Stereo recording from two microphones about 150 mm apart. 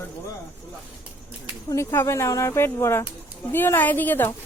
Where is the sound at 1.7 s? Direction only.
15° left (ahead or behind).